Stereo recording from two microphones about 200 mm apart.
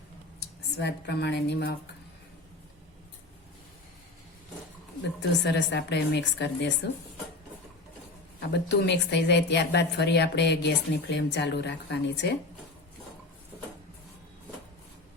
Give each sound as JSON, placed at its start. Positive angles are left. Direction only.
{"t": 0.3, "sound": "speech", "side_deg": 60}
{"t": 5.5, "sound": "speech", "side_deg": 60}
{"t": 8.4, "sound": "speech", "side_deg": 60}